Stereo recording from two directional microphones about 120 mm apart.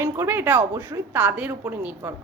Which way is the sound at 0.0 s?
20° right (ahead or behind).